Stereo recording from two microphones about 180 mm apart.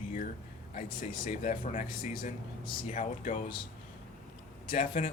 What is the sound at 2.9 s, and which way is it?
Speech, 45° left (ahead or behind).